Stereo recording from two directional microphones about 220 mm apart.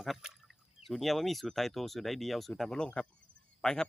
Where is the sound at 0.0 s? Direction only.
Centre (ahead or behind).